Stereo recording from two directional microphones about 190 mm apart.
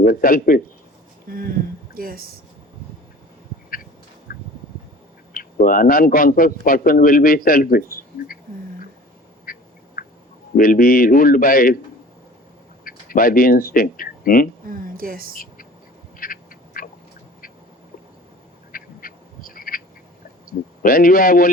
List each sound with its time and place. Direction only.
0.0 s a man's voice: 50° left (ahead or behind)
1.3 s speech: 50° right (ahead or behind)
4.3 s a sound: 50° left (ahead or behind)
5.3 s a man's voice: 45° left (ahead or behind)
9.5 s duck: 50° left (ahead or behind)
10.6 s a man's voice: 50° left (ahead or behind)
12.8 s speech: 50° left (ahead or behind)
14.7 s speech: 50° right (ahead or behind)
16.1 s duck: 45° left (ahead or behind)
18.7 s duck: 50° left (ahead or behind)
20.8 s a man's voice: 50° left (ahead or behind)